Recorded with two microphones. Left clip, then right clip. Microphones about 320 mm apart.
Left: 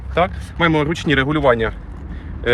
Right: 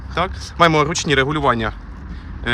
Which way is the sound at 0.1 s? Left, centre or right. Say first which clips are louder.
Left 4 dB; centre.